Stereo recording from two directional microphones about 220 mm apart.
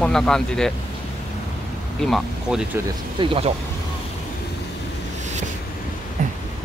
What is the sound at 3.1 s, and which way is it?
Speech, 25° right (ahead or behind).